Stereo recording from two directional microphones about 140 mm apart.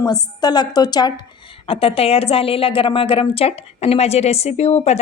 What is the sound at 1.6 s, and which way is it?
A woman's voice, 45° left (ahead or behind).